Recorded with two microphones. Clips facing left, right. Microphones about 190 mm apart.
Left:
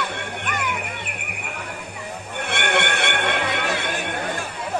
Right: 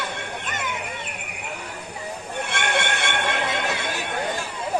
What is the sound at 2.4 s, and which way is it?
Music, 60° left (ahead or behind).